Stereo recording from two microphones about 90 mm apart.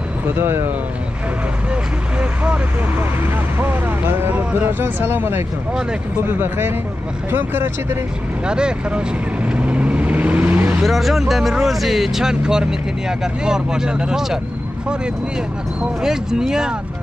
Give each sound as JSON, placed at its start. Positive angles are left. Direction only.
{"t": 0.4, "sound": "speech", "side_deg": -25}
{"t": 3.5, "sound": "speech", "side_deg": -25}
{"t": 8.5, "sound": "vehicle", "side_deg": -10}
{"t": 10.8, "sound": "speech", "side_deg": 0}
{"t": 15.8, "sound": "speech", "side_deg": -5}